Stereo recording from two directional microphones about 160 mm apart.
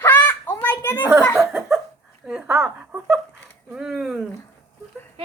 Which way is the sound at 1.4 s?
Centre (ahead or behind).